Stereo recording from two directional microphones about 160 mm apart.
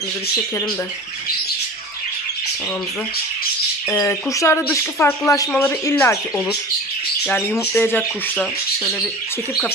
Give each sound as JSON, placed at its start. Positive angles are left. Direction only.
{"t": 3.9, "sound": "speech", "side_deg": 15}
{"t": 7.2, "sound": "speech", "side_deg": 10}